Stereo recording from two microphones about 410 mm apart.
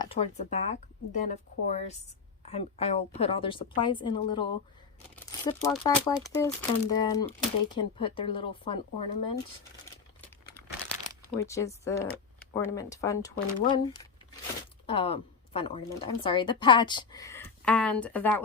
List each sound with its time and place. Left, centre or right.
0.0 s speech: centre
11.3 s speech: centre